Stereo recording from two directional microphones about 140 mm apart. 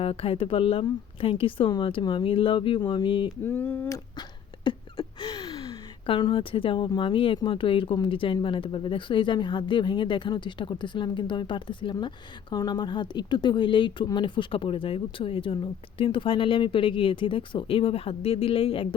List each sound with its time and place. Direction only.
0.0 s speech: 40° left (ahead or behind)
3.4 s speech: 15° left (ahead or behind)
4.6 s a sound: 35° left (ahead or behind)
6.1 s speech: 35° left (ahead or behind)